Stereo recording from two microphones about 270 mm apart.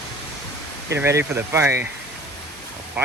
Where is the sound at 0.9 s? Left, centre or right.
Centre.